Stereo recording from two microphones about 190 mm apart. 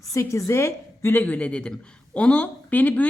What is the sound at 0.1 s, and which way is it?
A woman's voice, 15° left (ahead or behind).